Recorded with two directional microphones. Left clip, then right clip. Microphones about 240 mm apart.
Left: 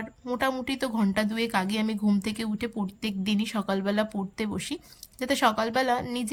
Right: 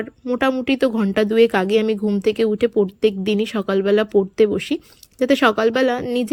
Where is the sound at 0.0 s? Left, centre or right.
Centre.